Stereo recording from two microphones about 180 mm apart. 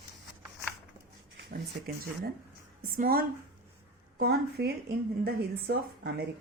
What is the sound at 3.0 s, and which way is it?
A woman's voice, 55° right (ahead or behind).